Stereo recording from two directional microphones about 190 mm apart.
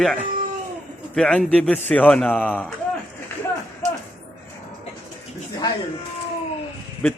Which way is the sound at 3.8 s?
40° right (ahead or behind).